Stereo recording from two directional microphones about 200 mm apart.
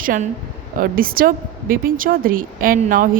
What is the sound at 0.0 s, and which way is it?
A woman's voice, 45° right (ahead or behind).